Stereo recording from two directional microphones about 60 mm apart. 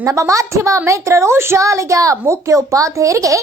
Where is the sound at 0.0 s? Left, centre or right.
Right.